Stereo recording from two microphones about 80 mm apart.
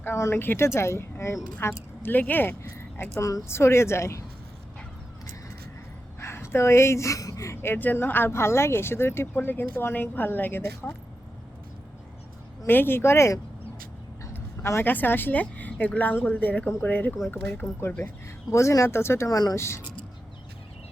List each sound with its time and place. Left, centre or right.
0.0 s speech: left
6.1 s speech: left
7.5 s speech: left
12.6 s speech: left
14.3 s a sound: left
14.8 s speech: left
19.3 s speech: left
19.5 s speech: left